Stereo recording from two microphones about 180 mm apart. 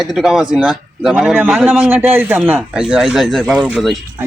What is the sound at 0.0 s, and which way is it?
Speech, centre (ahead or behind).